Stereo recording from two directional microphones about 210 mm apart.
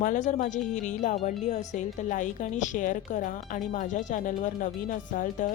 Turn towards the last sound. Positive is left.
turn(degrees=40)  # may be behind; listen again after turning